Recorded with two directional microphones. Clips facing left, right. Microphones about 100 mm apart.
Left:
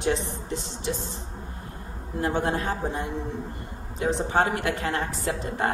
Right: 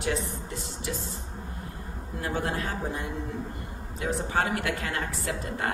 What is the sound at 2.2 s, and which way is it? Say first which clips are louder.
A woman's voice: left 5 dB; 30° left (ahead or behind).